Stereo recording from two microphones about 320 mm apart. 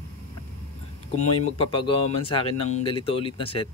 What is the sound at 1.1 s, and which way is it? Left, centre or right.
Speech, left.